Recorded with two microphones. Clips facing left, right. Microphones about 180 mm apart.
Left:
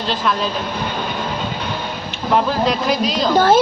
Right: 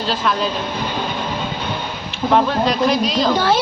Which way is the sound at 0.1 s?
Centre (ahead or behind).